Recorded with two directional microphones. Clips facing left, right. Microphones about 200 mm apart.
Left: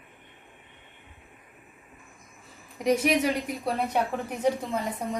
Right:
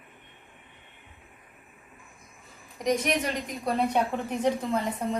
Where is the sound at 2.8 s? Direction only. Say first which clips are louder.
Left 3 dB; 5° left (ahead or behind).